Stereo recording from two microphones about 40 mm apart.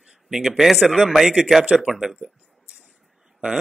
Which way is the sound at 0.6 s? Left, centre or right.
Centre.